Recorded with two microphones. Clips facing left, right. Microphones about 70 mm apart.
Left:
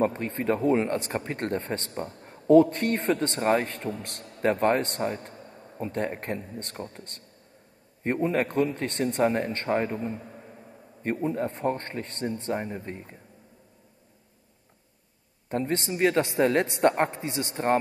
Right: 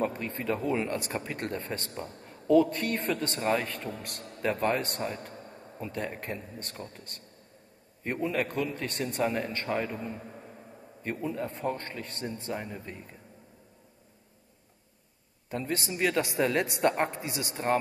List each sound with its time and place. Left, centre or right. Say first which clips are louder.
0.0 s a woman's voice: left 5 dB; left
10.1 s a sound: left 2 dB; centre
11.0 s a woman's voice: left 5 dB; left
15.5 s a woman's voice: left 5 dB; left